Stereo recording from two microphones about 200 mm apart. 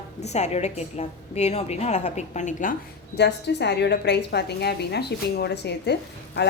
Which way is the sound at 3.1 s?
55° left (ahead or behind).